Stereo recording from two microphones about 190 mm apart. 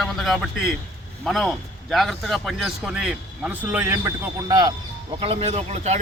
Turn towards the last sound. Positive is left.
turn(degrees=-35)  # may be behind; listen again after turning